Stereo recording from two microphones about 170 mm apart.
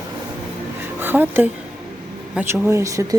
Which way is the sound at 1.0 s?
10° right (ahead or behind).